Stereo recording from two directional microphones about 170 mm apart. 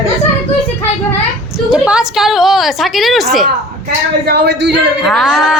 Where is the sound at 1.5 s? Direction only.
5° right (ahead or behind).